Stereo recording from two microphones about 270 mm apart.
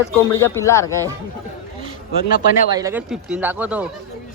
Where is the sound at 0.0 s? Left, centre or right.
Centre.